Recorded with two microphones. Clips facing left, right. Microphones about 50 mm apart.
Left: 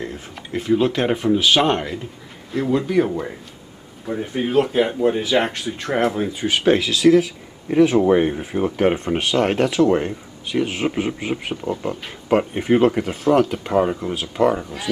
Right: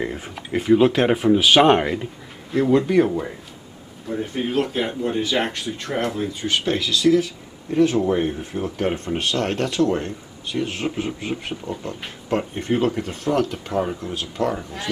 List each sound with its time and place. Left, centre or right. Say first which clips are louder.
0.0 s speech: right 3 dB; centre
2.5 s speech: right 2 dB; centre